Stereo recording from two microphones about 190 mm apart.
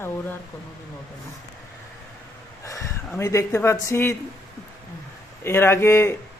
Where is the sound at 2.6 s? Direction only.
15° left (ahead or behind).